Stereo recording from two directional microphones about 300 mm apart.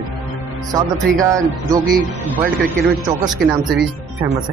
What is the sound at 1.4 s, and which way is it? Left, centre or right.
Speech, centre.